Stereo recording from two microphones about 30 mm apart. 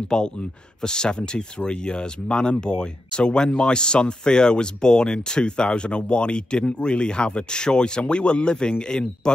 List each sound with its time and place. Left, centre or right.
0.1 s speech: left